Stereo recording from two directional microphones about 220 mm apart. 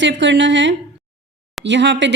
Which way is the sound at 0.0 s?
55° right (ahead or behind).